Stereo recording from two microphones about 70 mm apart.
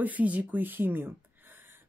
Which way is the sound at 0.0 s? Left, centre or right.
Right.